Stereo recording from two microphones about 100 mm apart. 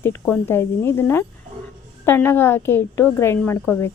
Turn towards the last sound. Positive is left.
turn(degrees=20)  # may be behind; listen again after turning